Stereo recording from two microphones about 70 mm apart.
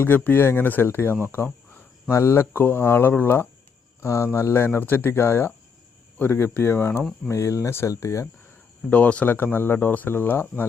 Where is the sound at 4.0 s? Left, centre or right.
Left.